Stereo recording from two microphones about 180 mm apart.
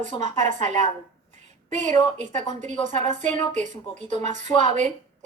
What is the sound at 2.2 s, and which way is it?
A woman's voice, 40° right (ahead or behind).